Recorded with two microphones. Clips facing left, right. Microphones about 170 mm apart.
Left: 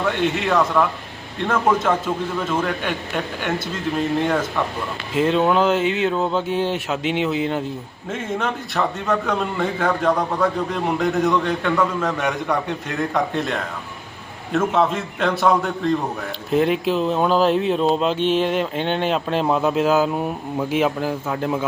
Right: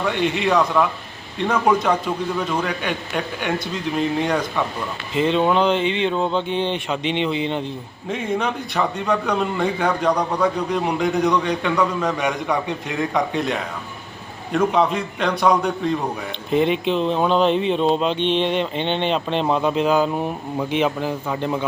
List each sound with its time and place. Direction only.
0.0 s a man's voice: centre (ahead or behind)